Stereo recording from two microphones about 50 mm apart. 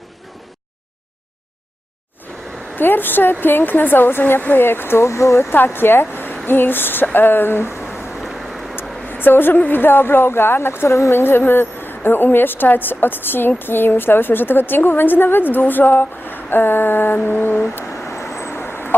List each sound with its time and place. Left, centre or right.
2.7 s a woman's voice: left
5.0 s speech: left
5.5 s a woman's voice: left
8.2 s vehicle: centre
8.7 s a sound: left
9.6 s a woman's voice: left
11.1 s a woman's voice: left
17.9 s vehicle: left